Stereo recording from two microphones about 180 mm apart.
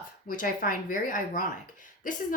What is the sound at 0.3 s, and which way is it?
Speech, 50° left (ahead or behind).